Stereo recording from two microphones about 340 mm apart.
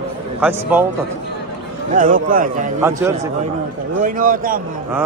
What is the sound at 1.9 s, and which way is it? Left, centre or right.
Speech, right.